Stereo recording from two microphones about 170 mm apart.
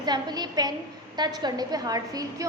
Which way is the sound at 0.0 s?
25° right (ahead or behind).